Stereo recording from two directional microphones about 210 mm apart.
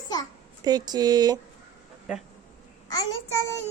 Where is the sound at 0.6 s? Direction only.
20° right (ahead or behind).